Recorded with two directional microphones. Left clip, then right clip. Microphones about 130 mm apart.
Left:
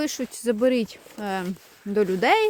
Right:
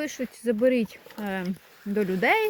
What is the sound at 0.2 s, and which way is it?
Speech, 35° left (ahead or behind).